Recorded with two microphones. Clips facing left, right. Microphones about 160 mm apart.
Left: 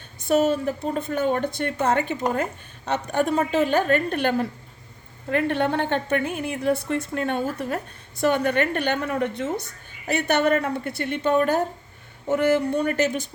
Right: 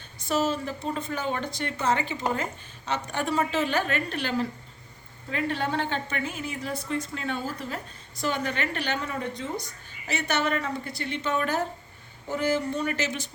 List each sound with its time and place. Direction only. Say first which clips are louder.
0.3 s a woman's voice: left 6 dB; 60° left (ahead or behind)
12.3 s a woman's voice: left 6 dB; 60° left (ahead or behind)